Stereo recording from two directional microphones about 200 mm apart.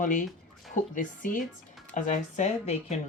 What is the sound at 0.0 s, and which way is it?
Speech, 40° left (ahead or behind).